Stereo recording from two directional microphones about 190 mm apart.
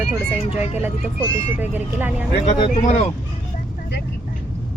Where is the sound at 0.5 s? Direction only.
35° left (ahead or behind).